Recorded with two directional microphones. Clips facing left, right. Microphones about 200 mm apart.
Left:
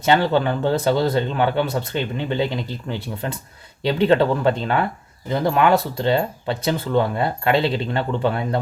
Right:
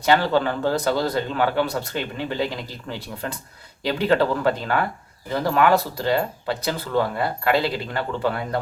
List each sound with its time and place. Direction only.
0.0 s speech: 20° left (ahead or behind)